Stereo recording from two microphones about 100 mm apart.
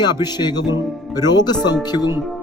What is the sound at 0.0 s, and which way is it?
Speech, 45° left (ahead or behind).